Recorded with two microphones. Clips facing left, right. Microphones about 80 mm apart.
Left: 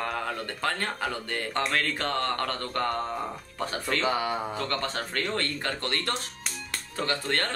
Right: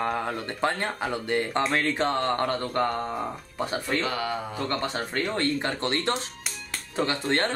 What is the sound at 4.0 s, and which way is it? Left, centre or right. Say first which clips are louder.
Speech: left 1 dB; centre.